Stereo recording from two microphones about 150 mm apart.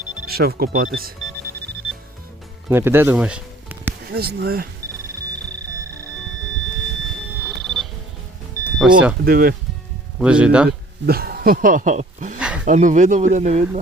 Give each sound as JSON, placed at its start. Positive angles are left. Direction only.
{"t": 0.3, "sound": "speech", "side_deg": -90}
{"t": 2.6, "sound": "speech", "side_deg": -15}
{"t": 4.1, "sound": "speech", "side_deg": -90}
{"t": 7.4, "sound": "alarm clock", "side_deg": 0}
{"t": 8.8, "sound": "speech", "side_deg": -5}
{"t": 9.2, "sound": "speech", "side_deg": -80}
{"t": 10.2, "sound": "speech", "side_deg": -5}
{"t": 10.7, "sound": "speech", "side_deg": -90}
{"t": 12.4, "sound": "a sound", "side_deg": -5}
{"t": 12.6, "sound": "speech", "side_deg": -55}